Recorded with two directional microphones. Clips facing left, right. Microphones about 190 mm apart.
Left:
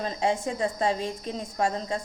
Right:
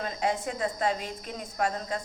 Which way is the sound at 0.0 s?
30° left (ahead or behind).